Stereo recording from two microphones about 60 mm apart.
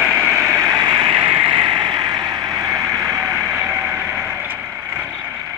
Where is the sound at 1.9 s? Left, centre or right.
Right.